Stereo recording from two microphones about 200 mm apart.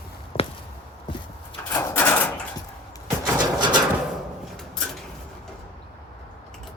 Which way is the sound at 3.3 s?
20° right (ahead or behind).